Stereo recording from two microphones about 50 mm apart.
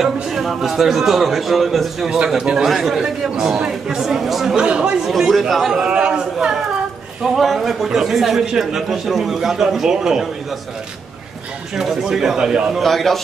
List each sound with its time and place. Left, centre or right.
0.0 s a man's voice: centre
2.0 s speech: centre
4.6 s speech: centre
5.3 s a man's voice: centre
5.9 s a sound: centre
7.2 s a man's voice: centre
11.7 s speech: centre
12.8 s a man's voice: centre